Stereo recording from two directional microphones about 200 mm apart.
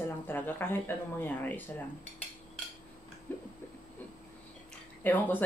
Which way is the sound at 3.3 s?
10° left (ahead or behind).